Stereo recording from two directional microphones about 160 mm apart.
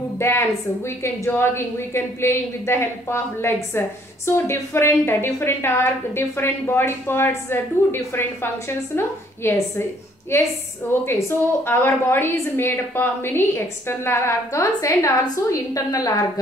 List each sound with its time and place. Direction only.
0.2 s a woman's voice: 15° left (ahead or behind)